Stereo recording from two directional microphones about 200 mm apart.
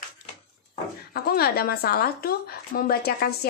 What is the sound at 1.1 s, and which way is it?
A woman's voice, 50° left (ahead or behind).